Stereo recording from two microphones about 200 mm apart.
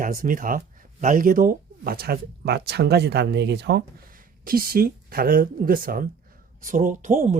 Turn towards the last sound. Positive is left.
turn(degrees=-40)  # may be behind; listen again after turning